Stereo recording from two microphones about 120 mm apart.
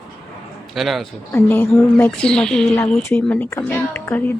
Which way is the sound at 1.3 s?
15° left (ahead or behind).